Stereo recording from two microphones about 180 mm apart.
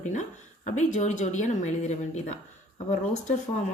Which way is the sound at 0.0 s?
40° left (ahead or behind).